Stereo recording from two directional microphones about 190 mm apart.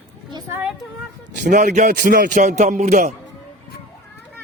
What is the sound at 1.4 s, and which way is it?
A man's voice, 40° right (ahead or behind).